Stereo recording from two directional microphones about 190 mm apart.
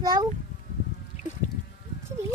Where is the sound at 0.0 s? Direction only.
20° right (ahead or behind).